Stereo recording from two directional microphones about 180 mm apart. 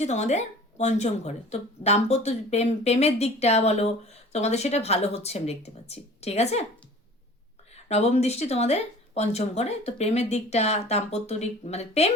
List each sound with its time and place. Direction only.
0.0 s a woman's voice: 40° left (ahead or behind)
7.9 s a woman's voice: 35° left (ahead or behind)